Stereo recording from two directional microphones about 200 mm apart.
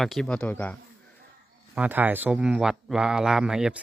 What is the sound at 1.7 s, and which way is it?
Speech, 10° right (ahead or behind).